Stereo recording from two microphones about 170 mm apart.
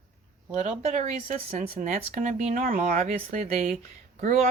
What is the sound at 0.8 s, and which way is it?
Speech, 40° right (ahead or behind).